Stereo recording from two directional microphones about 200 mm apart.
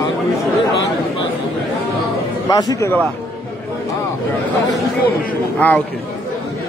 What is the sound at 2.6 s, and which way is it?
Speech, 15° left (ahead or behind).